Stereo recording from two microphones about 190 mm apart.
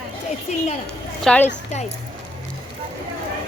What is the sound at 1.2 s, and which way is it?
Speech, 5° left (ahead or behind).